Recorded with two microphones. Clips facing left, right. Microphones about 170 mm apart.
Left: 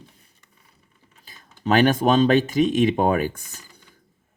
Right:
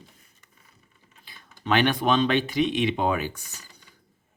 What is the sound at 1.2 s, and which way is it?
Speech, 40° left (ahead or behind).